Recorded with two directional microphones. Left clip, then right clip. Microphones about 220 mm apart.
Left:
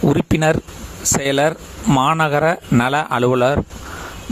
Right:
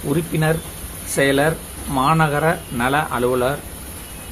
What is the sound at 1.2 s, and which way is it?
Speech, 50° left (ahead or behind).